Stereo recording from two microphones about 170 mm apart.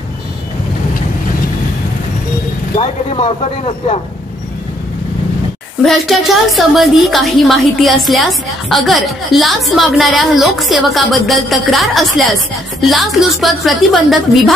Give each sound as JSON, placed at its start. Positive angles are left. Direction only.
{"t": 2.7, "sound": "speech", "side_deg": 35}
{"t": 5.9, "sound": "a woman's voice", "side_deg": 0}